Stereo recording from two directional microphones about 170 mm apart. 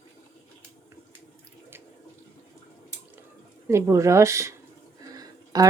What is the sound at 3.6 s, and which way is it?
Speech, 15° right (ahead or behind).